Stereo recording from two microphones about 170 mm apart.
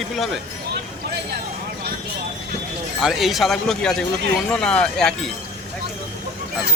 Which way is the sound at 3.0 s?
Centre (ahead or behind).